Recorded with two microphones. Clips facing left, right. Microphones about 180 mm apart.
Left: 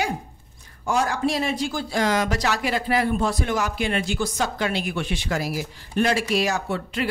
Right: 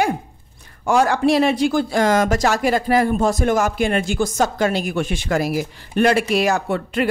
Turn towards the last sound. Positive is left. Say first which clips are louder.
# right 6 dB
turn(degrees=-55)  # may be behind; listen again after turning